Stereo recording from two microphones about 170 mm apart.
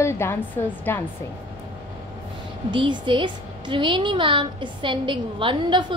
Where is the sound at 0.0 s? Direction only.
15° left (ahead or behind).